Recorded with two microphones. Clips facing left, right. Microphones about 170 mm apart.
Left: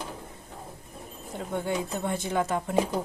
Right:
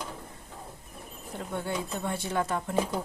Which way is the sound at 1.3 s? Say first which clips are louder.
Left 3 dB; 15° left (ahead or behind).